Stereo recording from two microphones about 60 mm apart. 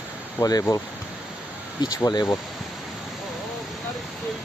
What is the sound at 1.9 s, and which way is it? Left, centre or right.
Speech, left.